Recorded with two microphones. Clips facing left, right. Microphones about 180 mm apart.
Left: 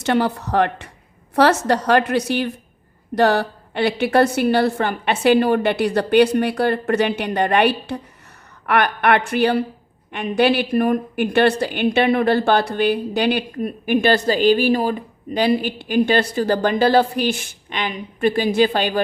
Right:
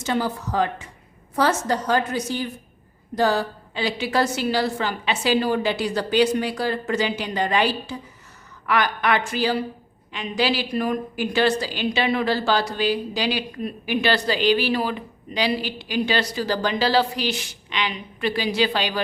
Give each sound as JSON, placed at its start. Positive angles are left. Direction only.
{"t": 0.0, "sound": "a woman's voice", "side_deg": 65}